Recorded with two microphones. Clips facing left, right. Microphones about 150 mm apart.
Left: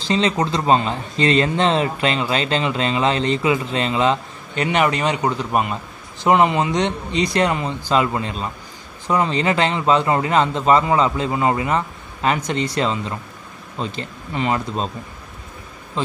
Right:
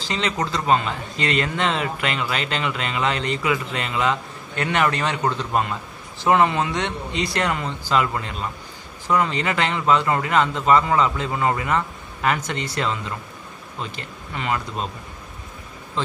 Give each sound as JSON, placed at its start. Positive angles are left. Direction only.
{"t": 0.1, "sound": "speech", "side_deg": 25}
{"t": 4.6, "sound": "a man's voice", "side_deg": 15}